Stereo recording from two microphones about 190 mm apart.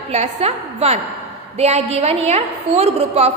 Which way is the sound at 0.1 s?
35° right (ahead or behind).